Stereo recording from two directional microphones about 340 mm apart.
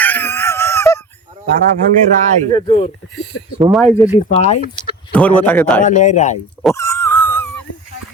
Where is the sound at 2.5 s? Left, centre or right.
Centre.